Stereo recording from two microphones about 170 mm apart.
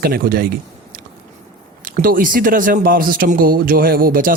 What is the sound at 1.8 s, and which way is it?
Speech, 55° right (ahead or behind).